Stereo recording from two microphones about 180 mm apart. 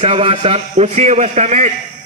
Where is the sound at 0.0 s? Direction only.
35° right (ahead or behind).